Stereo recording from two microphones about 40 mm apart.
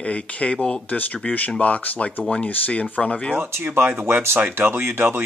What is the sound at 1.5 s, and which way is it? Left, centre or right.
Speech, left.